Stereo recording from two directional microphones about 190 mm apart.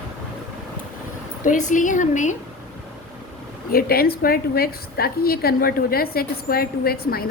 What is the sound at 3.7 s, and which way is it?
A woman's voice, 50° left (ahead or behind).